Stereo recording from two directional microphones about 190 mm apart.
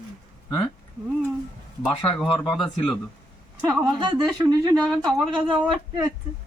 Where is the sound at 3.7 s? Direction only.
20° right (ahead or behind).